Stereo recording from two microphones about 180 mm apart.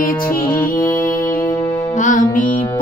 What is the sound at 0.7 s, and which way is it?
Music, 50° left (ahead or behind).